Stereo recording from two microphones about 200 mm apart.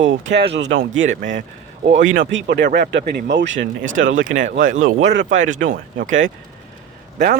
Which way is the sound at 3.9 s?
75° right (ahead or behind).